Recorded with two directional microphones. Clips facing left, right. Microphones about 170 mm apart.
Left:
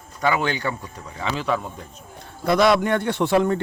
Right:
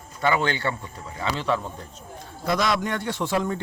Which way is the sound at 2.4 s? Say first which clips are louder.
Left 6 dB; 60° left (ahead or behind).